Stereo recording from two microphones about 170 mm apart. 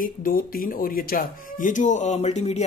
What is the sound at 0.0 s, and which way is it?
Speech, 55° left (ahead or behind).